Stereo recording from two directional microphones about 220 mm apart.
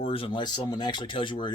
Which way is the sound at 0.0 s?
25° left (ahead or behind).